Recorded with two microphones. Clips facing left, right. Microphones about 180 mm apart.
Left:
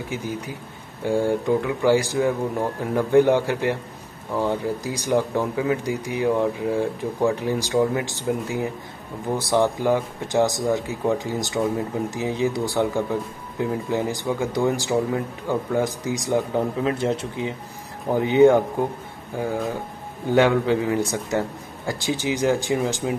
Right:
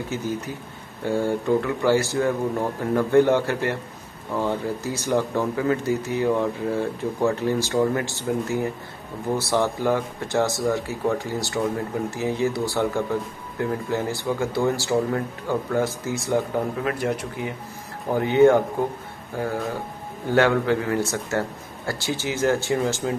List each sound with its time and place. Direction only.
0.1 s speech: 10° left (ahead or behind)